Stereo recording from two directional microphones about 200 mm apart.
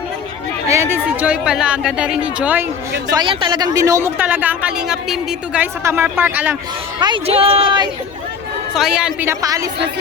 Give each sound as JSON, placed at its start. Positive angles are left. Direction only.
{"t": 0.7, "sound": "speech", "side_deg": -15}
{"t": 3.1, "sound": "speech", "side_deg": -20}
{"t": 5.8, "sound": "speech", "side_deg": -10}
{"t": 7.0, "sound": "speech", "side_deg": -25}
{"t": 8.7, "sound": "speech", "side_deg": -5}